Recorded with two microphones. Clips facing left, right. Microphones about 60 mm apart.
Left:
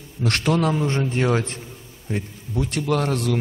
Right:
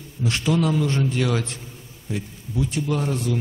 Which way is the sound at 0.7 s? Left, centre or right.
Left.